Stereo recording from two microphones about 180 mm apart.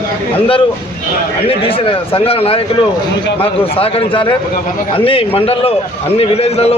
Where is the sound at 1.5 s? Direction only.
30° left (ahead or behind).